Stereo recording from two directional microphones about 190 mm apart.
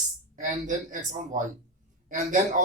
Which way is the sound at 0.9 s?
45° right (ahead or behind).